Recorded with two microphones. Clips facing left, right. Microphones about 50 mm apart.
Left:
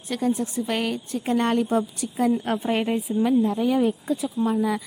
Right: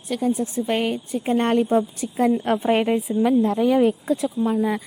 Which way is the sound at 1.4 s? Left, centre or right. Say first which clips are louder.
Right 3 dB; right.